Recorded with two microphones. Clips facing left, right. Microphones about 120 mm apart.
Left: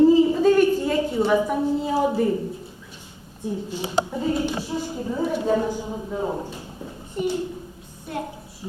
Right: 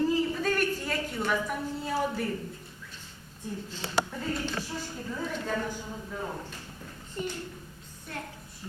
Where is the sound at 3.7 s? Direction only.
15° left (ahead or behind).